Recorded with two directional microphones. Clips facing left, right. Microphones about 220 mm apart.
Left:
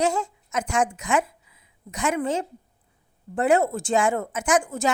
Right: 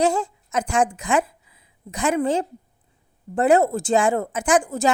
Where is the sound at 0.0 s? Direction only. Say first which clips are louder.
Right 3 dB; 35° right (ahead or behind).